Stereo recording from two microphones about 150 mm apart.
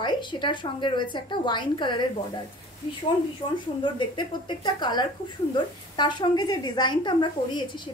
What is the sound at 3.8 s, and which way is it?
A woman's voice, 30° left (ahead or behind).